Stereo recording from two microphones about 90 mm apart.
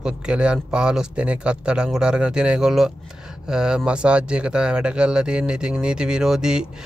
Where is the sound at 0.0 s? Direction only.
10° right (ahead or behind).